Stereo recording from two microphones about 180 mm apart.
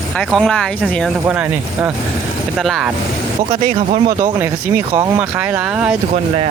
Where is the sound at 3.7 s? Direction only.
45° right (ahead or behind).